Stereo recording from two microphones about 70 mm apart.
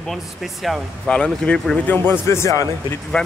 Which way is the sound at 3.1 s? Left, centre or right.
Centre.